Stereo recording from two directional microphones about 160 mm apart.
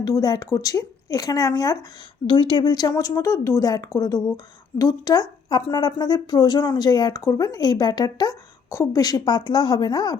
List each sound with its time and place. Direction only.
0.0 s a woman's voice: 25° left (ahead or behind)